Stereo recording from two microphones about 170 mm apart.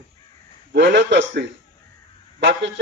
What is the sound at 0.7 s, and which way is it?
A man's voice, 90° right.